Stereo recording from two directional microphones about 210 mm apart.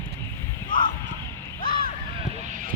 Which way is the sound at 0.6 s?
40° left (ahead or behind).